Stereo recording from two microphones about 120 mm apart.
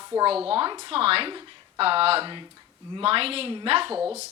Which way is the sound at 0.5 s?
45° right (ahead or behind).